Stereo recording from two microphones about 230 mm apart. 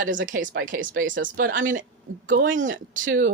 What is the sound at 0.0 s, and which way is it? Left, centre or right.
Speech, right.